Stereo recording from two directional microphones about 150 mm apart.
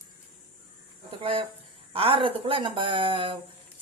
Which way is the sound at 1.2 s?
35° right (ahead or behind).